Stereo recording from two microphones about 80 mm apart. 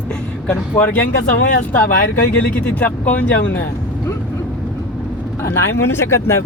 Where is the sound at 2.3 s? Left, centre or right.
Centre.